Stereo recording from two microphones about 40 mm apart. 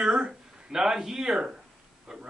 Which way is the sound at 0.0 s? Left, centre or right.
Right.